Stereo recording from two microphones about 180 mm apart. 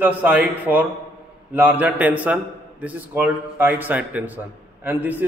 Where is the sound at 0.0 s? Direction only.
10° right (ahead or behind).